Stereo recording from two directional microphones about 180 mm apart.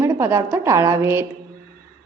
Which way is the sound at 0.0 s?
15° right (ahead or behind).